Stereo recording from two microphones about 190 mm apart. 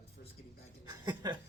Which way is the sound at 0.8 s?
20° right (ahead or behind).